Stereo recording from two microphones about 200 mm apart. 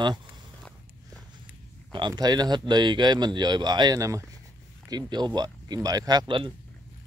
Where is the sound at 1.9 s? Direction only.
20° right (ahead or behind).